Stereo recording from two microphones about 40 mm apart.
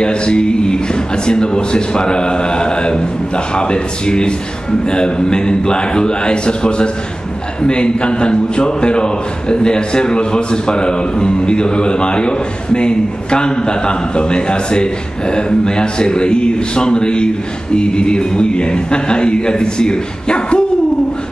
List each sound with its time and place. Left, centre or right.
0.0 s a man's voice: left